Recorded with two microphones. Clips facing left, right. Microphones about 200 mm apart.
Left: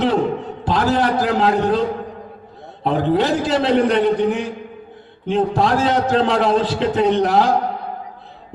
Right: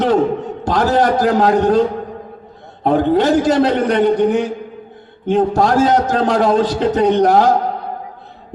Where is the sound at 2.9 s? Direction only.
45° right (ahead or behind).